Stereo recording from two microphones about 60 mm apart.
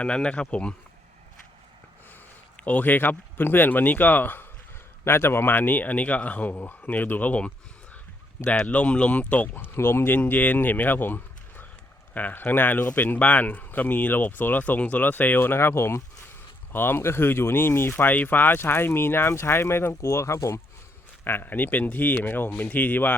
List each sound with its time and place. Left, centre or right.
0.0 s speech: centre
2.6 s speech: left
5.0 s speech: left
8.6 s speech: left
9.7 s speech: left
19.9 s speech: left
21.2 s speech: left